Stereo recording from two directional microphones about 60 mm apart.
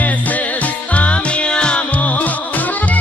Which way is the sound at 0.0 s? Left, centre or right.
Left.